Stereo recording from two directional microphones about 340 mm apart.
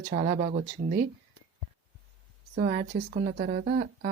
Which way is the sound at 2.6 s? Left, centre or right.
Right.